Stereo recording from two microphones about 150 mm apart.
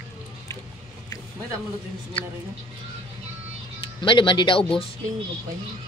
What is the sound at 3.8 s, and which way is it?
Speech, 35° left (ahead or behind).